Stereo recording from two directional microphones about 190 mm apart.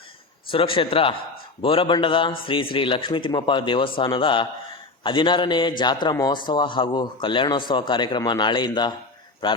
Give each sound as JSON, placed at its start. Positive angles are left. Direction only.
{"t": 0.5, "sound": "a man's voice", "side_deg": 30}